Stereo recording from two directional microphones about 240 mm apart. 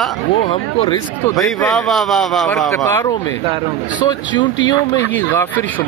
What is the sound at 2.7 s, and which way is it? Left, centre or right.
Speech, centre.